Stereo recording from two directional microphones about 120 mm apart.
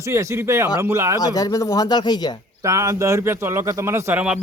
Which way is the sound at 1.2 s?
30° left (ahead or behind).